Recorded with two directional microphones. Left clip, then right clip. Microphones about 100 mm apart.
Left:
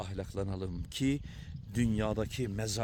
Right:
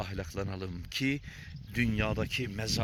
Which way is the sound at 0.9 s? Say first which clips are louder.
Right 2 dB; 45° left (ahead or behind).